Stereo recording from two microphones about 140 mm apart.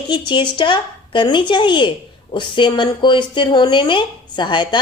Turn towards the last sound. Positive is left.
turn(degrees=35)  # may be behind; listen again after turning